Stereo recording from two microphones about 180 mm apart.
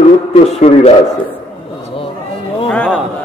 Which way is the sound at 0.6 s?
35° left (ahead or behind).